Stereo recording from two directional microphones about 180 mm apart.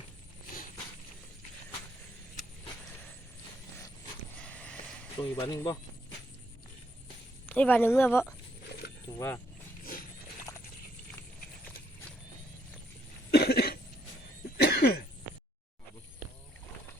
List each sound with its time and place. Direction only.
4.4 s a sound: 5° left (ahead or behind)
5.4 s speech: 20° left (ahead or behind)
7.4 s speech: 10° left (ahead or behind)
10.5 s clip-clop: 20° left (ahead or behind)
13.3 s cough: 60° left (ahead or behind)